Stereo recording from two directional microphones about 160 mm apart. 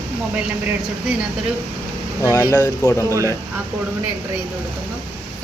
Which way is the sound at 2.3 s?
20° left (ahead or behind).